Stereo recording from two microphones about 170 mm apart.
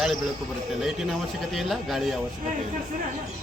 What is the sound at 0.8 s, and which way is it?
A man's voice, 5° right (ahead or behind).